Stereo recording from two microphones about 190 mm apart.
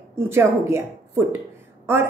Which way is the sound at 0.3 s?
15° right (ahead or behind).